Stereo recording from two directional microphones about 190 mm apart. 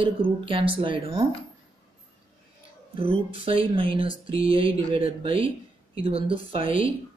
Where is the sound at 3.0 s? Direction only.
30° right (ahead or behind).